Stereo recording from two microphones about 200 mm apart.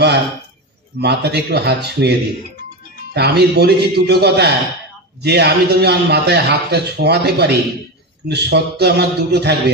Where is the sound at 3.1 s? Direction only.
55° right (ahead or behind).